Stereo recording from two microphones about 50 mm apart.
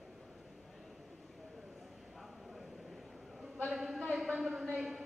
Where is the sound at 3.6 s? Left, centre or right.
Centre.